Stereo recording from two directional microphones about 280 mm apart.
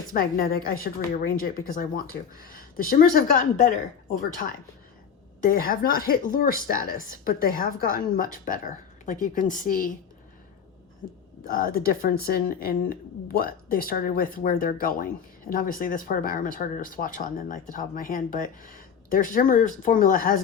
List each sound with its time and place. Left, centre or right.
0.1 s a woman's voice: left
11.4 s a woman's voice: left